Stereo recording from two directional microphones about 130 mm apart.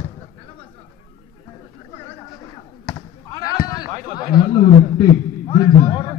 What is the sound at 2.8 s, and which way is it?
Basketball bounce, 30° left (ahead or behind).